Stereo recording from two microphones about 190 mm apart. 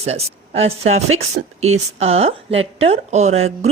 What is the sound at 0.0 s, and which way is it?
A woman's voice, 35° right (ahead or behind).